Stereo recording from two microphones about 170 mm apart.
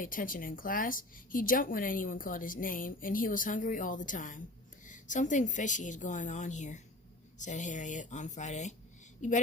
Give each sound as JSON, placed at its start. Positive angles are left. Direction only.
{"t": 0.0, "sound": "a woman's voice", "side_deg": 55}